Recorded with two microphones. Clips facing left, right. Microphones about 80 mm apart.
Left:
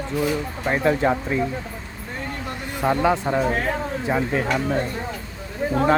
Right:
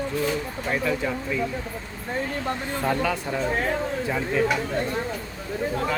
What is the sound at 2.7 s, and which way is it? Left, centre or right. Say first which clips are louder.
Speech: left 7 dB; centre.